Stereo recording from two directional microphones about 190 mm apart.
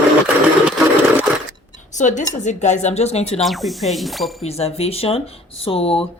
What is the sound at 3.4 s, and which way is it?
Speech, centre (ahead or behind).